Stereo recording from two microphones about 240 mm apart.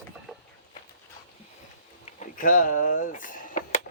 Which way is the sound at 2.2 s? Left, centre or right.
Left.